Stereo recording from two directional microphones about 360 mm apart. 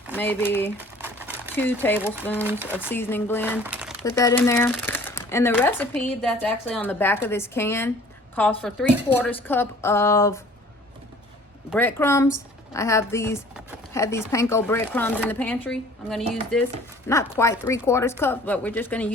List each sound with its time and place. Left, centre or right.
0.1 s speech: centre
2.4 s speech: centre
2.9 s speech: centre
3.6 s crumpling: centre
4.2 s speech: centre
11.7 s speech: centre